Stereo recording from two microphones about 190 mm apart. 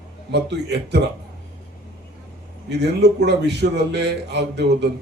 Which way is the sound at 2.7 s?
60° right (ahead or behind).